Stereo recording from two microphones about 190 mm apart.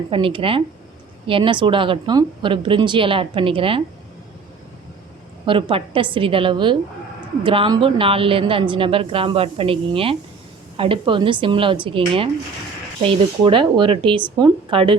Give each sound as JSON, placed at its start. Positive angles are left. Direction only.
{"t": 0.1, "sound": "a woman's voice", "side_deg": -25}
{"t": 5.5, "sound": "a woman's voice", "side_deg": -25}